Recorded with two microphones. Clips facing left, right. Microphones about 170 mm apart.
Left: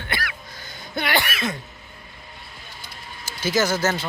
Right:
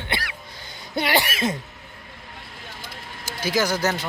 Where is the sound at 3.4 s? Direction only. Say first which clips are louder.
Left 1 dB; 10° right (ahead or behind).